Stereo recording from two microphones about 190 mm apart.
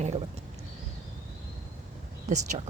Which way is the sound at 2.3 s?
40° right (ahead or behind).